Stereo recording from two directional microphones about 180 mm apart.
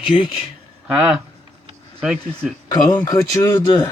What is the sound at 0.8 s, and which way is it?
Speech, 5° right (ahead or behind).